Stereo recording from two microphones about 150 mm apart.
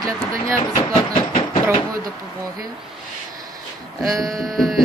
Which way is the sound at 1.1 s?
40° left (ahead or behind).